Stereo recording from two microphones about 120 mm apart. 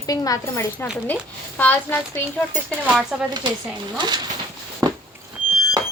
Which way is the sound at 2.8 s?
5° right (ahead or behind).